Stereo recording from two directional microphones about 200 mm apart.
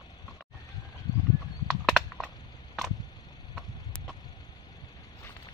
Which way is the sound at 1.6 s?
Centre (ahead or behind).